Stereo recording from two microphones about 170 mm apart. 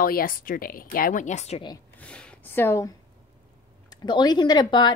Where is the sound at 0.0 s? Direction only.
55° left (ahead or behind); by 1.6 s 40° left (ahead or behind).